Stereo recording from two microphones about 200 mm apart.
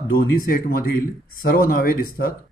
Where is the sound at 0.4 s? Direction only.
45° left (ahead or behind).